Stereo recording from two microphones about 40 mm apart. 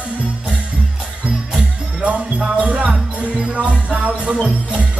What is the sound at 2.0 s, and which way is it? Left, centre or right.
Music, right.